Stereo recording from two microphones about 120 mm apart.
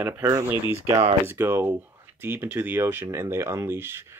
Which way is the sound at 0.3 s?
25° right (ahead or behind).